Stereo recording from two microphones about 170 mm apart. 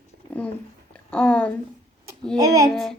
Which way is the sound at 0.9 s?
5° left (ahead or behind).